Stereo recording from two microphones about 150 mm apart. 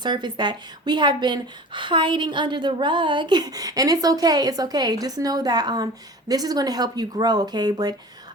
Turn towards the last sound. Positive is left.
turn(degrees=-25)  # may be behind; listen again after turning